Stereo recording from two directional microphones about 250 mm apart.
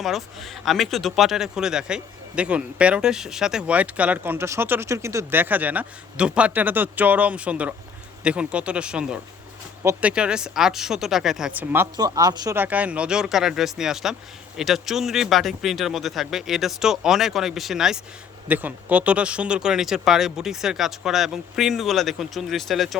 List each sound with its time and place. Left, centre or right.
0.0 s a woman's voice: centre